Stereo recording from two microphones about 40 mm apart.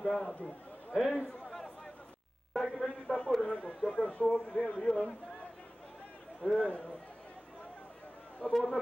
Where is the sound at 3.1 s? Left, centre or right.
Left.